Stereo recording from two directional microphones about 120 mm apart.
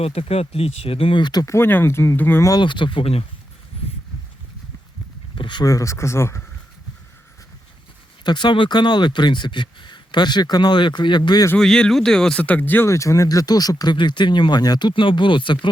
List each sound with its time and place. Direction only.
0.0 s speech: 55° left (ahead or behind); by 1.5 s 35° left (ahead or behind)
1.5 s speech: 20° left (ahead or behind)
2.5 s speech: 40° left (ahead or behind)
5.3 s a sound: 40° left (ahead or behind)
5.6 s speech: 25° left (ahead or behind)
8.2 s speech: 40° left (ahead or behind)
11.5 s speech: 5° left (ahead or behind); by 15.7 s 40° left (ahead or behind)